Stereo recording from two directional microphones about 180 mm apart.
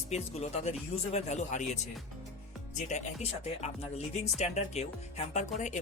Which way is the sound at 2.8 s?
40° left (ahead or behind).